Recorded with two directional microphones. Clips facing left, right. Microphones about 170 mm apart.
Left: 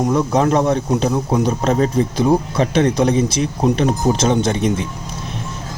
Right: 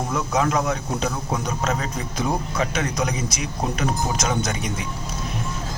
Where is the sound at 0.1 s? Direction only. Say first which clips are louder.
Left 4 dB; 30° left (ahead or behind).